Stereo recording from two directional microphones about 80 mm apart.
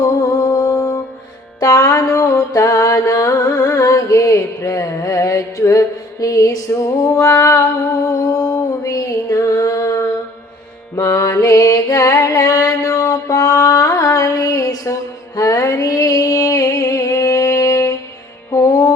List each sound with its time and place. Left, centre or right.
0.0 s music: left